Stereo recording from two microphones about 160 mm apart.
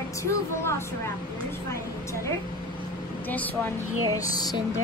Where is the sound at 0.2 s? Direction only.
15° left (ahead or behind).